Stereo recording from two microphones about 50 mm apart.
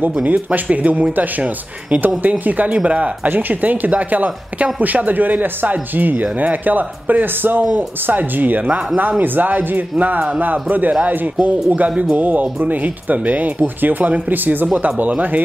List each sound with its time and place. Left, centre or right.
0.0 s speech: right
2.0 s speech: right
3.3 s speech: right